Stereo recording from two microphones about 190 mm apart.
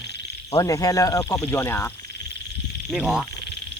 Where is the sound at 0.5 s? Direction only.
20° left (ahead or behind).